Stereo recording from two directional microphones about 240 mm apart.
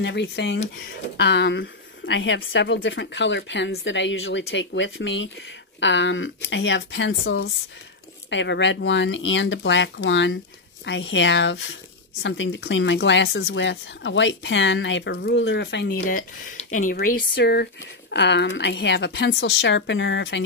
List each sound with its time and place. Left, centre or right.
0.0 s speech: left